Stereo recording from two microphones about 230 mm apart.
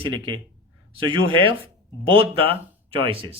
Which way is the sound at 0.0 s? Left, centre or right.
Centre.